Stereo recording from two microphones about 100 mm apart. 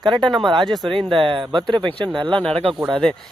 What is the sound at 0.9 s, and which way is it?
Speech, 55° right (ahead or behind).